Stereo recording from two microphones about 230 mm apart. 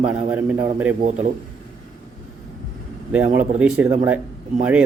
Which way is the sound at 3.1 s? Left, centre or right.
Centre.